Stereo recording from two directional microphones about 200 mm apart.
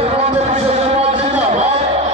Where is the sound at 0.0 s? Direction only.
30° right (ahead or behind).